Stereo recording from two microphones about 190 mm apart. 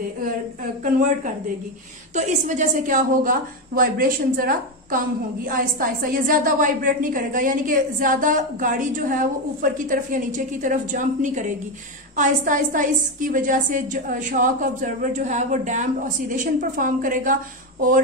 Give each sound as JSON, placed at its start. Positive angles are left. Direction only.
{"t": 2.1, "sound": "a woman's voice", "side_deg": -40}